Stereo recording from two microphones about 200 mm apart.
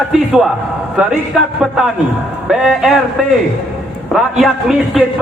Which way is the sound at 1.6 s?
Centre (ahead or behind).